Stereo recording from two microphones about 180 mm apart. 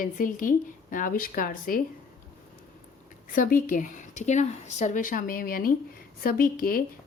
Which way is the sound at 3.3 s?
50° left (ahead or behind).